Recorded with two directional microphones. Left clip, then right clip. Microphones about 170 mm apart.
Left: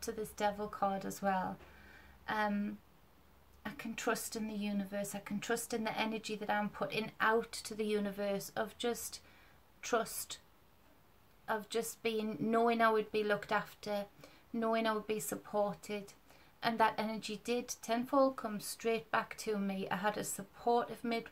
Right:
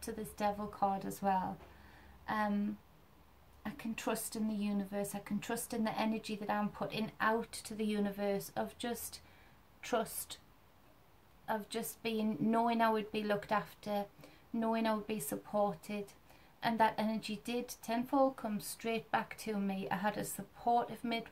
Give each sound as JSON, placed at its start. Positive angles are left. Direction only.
{"t": 0.0, "sound": "speech", "side_deg": 10}
{"t": 3.6, "sound": "a woman's voice", "side_deg": 10}
{"t": 11.4, "sound": "speech", "side_deg": 15}